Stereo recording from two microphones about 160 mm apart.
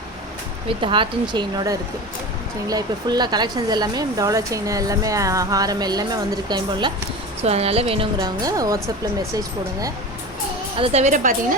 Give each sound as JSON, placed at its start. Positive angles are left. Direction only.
{"t": 0.7, "sound": "speech", "side_deg": -30}
{"t": 7.4, "sound": "speech", "side_deg": -40}
{"t": 8.4, "sound": "speech", "side_deg": -20}
{"t": 10.8, "sound": "a woman's voice", "side_deg": -40}